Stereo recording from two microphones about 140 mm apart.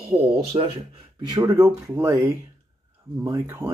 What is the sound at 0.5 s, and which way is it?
Speech, 45° right (ahead or behind).